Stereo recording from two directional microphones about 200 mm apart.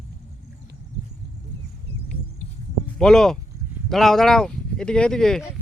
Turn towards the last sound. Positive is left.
turn(degrees=5)  # may be behind; listen again after turning